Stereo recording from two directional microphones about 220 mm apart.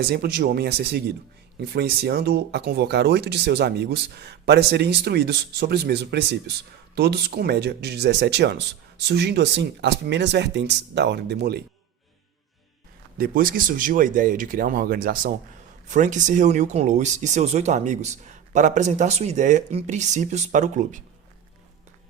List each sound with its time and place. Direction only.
0.0 s speech: 45° right (ahead or behind)
13.1 s speech: 40° right (ahead or behind)